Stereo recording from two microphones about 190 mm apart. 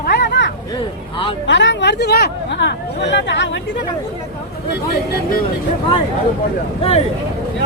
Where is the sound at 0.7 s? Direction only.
25° left (ahead or behind).